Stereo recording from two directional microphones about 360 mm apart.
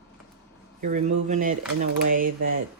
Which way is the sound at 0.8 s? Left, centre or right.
Centre.